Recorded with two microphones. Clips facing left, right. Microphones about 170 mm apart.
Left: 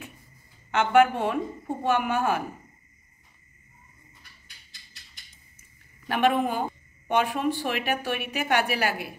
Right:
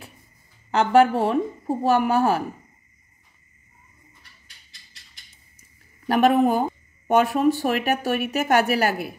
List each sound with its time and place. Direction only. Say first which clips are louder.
0.7 s speech: right 3 dB; 35° right (ahead or behind)
5.6 s a sound: right 3 dB; 40° right (ahead or behind)
7.1 s speech: right 6 dB; 40° right (ahead or behind)